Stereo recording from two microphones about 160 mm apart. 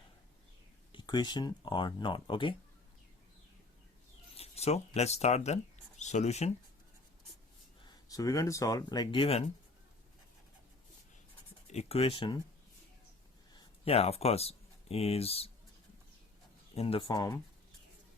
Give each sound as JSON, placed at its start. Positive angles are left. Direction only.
{"t": 0.9, "sound": "speech", "side_deg": 25}
{"t": 4.4, "sound": "speech", "side_deg": 40}
{"t": 7.9, "sound": "speech", "side_deg": 20}
{"t": 11.7, "sound": "speech", "side_deg": 40}
{"t": 13.8, "sound": "speech", "side_deg": 40}
{"t": 16.7, "sound": "speech", "side_deg": 35}
{"t": 17.2, "sound": "speech", "side_deg": 20}